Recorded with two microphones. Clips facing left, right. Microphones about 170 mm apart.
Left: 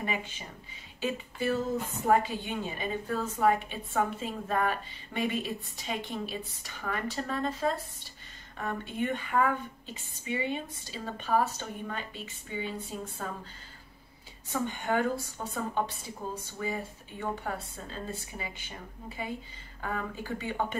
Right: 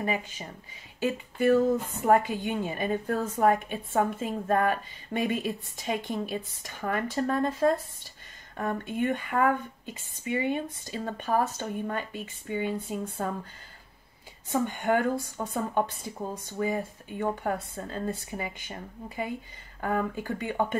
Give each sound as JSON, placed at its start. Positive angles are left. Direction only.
{"t": 0.0, "sound": "speech", "side_deg": -40}
{"t": 1.0, "sound": "a woman's voice", "side_deg": -55}
{"t": 14.5, "sound": "a woman's voice", "side_deg": -50}